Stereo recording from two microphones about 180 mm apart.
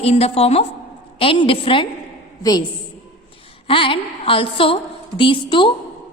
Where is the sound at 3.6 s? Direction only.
30° left (ahead or behind).